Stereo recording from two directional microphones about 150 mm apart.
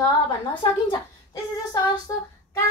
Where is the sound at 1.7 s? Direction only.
25° left (ahead or behind).